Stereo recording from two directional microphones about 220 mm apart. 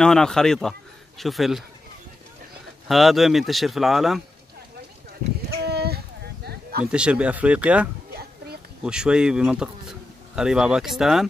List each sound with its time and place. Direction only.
0.0 s speech: 5° left (ahead or behind)
2.9 s speech: centre (ahead or behind)
5.6 s a sound: 45° right (ahead or behind)
6.9 s speech: 5° right (ahead or behind)
8.1 s a sound: 45° right (ahead or behind)
8.8 s speech: 5° right (ahead or behind)